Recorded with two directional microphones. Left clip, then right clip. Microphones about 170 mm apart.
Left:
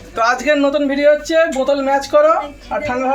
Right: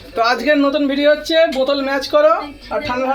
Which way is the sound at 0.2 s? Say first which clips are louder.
Even; 15° left (ahead or behind).